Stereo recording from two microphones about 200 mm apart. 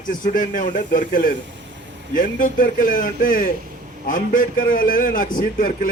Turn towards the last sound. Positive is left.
turn(degrees=45)  # may be behind; listen again after turning